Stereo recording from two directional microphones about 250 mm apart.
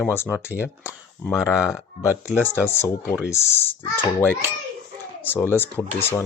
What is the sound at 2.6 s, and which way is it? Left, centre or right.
A child's voice, centre.